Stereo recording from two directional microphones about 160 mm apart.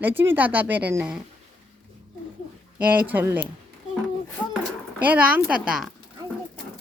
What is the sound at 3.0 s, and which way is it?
Speech, 10° right (ahead or behind).